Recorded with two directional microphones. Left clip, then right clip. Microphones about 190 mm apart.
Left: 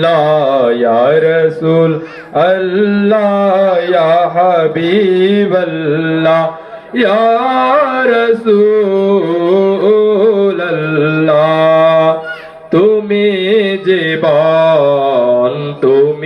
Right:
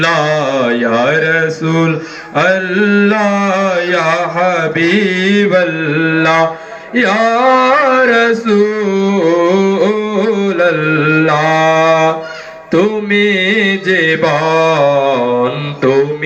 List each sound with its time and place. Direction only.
0.0 s mantra: 30° right (ahead or behind)
6.9 s music: 30° right (ahead or behind)
10.4 s mantra: 30° right (ahead or behind)